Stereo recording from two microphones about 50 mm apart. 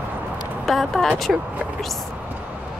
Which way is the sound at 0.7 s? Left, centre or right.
Centre.